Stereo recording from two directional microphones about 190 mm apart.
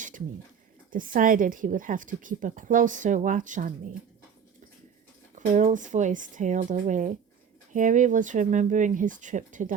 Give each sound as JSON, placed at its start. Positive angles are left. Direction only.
{"t": 0.9, "sound": "speech", "side_deg": -45}
{"t": 5.3, "sound": "speech", "side_deg": -40}